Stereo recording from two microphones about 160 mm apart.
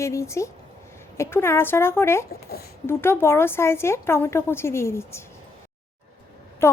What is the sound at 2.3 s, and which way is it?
Speech, 75° left (ahead or behind).